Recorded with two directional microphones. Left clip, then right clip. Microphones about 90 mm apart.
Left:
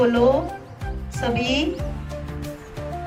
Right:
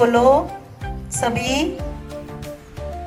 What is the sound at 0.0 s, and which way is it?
A woman's voice, 40° right (ahead or behind).